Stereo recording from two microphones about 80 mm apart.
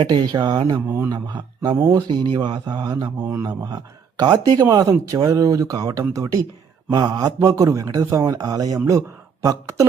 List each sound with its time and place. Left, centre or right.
0.0 s speech: right
0.9 s a man's voice: right
1.1 s speech: right
1.9 s speech: right
3.3 s speech: right
4.2 s speech: right
6.9 s speech: right
7.3 s speech: right